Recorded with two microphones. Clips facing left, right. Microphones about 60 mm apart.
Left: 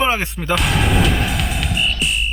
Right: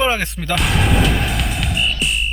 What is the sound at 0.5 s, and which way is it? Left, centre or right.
Music, centre.